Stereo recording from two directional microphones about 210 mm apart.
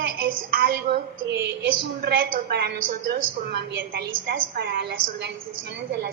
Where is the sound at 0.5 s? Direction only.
50° right (ahead or behind).